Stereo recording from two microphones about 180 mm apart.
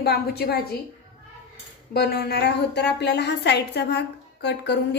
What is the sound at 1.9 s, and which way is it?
A woman's voice, 60° left (ahead or behind).